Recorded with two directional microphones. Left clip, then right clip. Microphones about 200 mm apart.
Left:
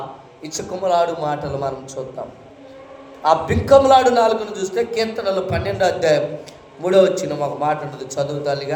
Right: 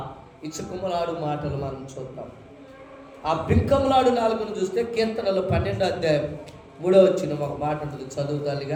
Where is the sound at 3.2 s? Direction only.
5° right (ahead or behind).